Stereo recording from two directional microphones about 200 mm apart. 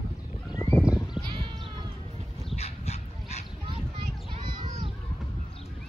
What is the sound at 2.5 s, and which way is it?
Dog, 30° left (ahead or behind).